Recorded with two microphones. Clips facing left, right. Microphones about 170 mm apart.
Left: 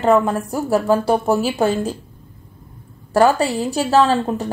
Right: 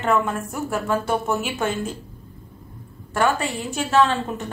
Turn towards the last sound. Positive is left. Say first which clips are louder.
# left 4 dB
turn(degrees=35)  # may be behind; listen again after turning